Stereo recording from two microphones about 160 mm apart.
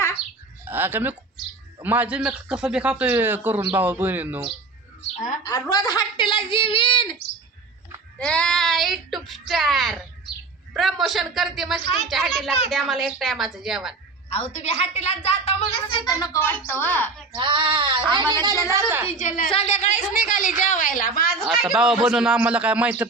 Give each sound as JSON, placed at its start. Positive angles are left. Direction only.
{"t": 0.6, "sound": "a sound", "side_deg": -10}
{"t": 1.8, "sound": "a man's voice", "side_deg": -10}
{"t": 5.1, "sound": "a woman's voice", "side_deg": 50}
{"t": 5.4, "sound": "a woman's voice", "side_deg": 20}
{"t": 8.2, "sound": "a woman's voice", "side_deg": 5}
{"t": 14.3, "sound": "a woman's voice", "side_deg": 40}
{"t": 17.3, "sound": "female singing", "side_deg": -30}
{"t": 19.5, "sound": "a woman's voice", "side_deg": 40}
{"t": 21.4, "sound": "a woman's voice", "side_deg": 0}